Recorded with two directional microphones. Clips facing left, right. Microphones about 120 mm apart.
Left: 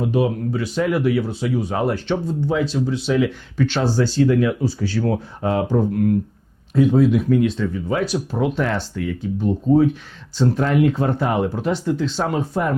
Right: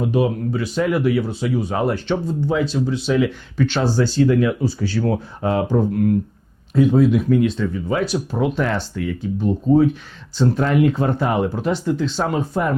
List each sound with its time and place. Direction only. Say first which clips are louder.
0.0 s speech: right 1 dB; 20° right (ahead or behind)
9.4 s speech: right 1 dB; 35° right (ahead or behind)